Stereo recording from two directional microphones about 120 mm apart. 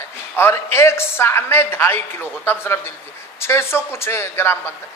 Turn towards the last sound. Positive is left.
turn(degrees=20)  # may be behind; listen again after turning